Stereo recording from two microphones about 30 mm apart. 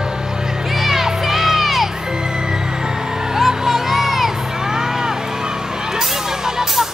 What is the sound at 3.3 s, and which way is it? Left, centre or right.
Music, centre.